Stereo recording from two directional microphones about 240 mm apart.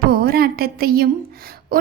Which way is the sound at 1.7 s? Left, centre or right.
Right.